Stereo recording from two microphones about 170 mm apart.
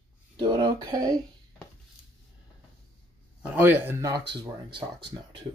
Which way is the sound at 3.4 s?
10° right (ahead or behind).